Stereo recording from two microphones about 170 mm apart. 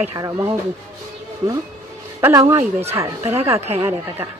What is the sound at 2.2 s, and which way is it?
Speech, 15° right (ahead or behind).